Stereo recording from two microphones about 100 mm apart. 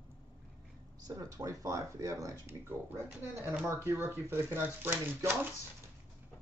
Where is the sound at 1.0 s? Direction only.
35° right (ahead or behind).